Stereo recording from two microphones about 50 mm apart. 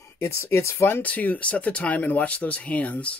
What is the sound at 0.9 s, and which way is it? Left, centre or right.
Speech, left.